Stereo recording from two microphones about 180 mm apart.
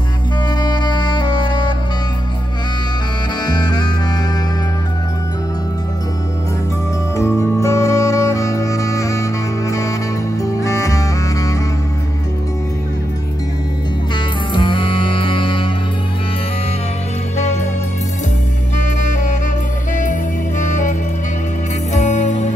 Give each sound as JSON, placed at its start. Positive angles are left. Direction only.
{"t": 0.6, "sound": "music", "side_deg": 25}
{"t": 3.4, "sound": "music", "side_deg": 25}
{"t": 7.2, "sound": "music", "side_deg": 15}
{"t": 14.5, "sound": "music", "side_deg": 25}
{"t": 19.0, "sound": "music", "side_deg": 45}
{"t": 21.9, "sound": "music", "side_deg": 40}